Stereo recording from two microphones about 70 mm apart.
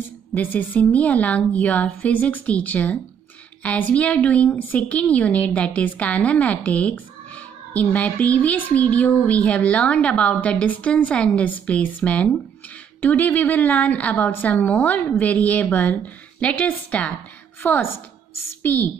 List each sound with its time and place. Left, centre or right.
0.3 s speech: left
17.6 s a woman's voice: left